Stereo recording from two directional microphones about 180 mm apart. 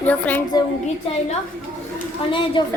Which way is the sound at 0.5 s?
20° left (ahead or behind).